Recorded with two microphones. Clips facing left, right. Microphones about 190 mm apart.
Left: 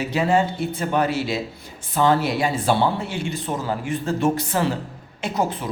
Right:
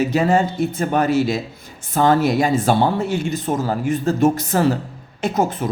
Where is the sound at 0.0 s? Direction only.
45° right (ahead or behind).